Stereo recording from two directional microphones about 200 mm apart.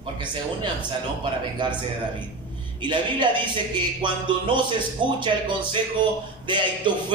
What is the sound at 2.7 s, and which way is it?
A man's voice, 25° right (ahead or behind).